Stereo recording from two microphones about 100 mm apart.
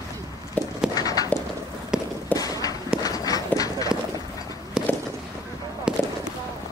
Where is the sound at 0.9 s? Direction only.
40° left (ahead or behind).